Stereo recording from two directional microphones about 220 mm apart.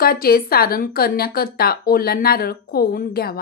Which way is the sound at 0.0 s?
40° left (ahead or behind).